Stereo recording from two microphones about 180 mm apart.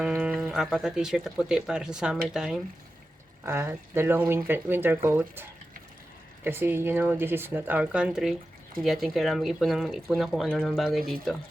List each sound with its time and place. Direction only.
0.0 s speech: 5° right (ahead or behind)
3.4 s speech: 15° right (ahead or behind)